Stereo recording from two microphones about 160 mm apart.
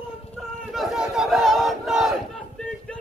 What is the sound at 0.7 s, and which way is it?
Battle cry, centre (ahead or behind).